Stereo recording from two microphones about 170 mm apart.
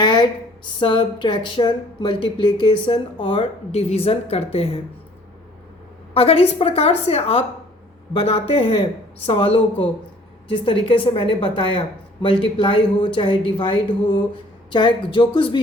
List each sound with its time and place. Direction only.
0.0 s speech: 25° left (ahead or behind)
6.1 s speech: 35° left (ahead or behind)